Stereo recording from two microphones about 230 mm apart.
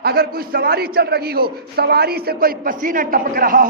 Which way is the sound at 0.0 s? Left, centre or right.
Right.